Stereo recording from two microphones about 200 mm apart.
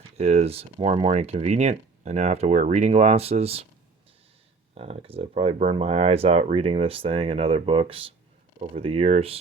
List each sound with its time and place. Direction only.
0.2 s speech: 35° right (ahead or behind)
4.7 s speech: 30° right (ahead or behind)